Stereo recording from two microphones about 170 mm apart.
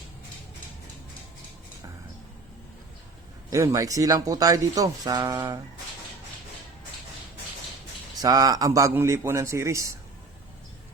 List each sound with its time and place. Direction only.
3.5 s speech: 20° right (ahead or behind)
8.2 s a man's voice: 20° right (ahead or behind)